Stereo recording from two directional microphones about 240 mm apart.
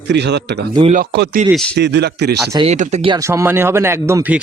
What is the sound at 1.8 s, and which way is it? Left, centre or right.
Speech, right.